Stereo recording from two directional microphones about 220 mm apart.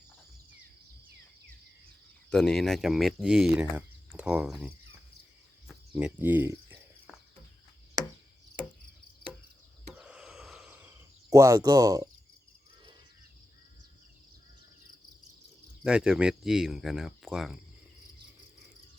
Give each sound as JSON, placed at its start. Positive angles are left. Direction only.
{"t": 2.3, "sound": "speech", "side_deg": 0}
{"t": 5.6, "sound": "cricket", "side_deg": -5}
{"t": 9.9, "sound": "a sound", "side_deg": -5}
{"t": 15.8, "sound": "speech", "side_deg": -5}